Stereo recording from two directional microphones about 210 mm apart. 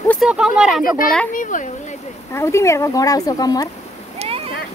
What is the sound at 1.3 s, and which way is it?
Speech, 40° left (ahead or behind).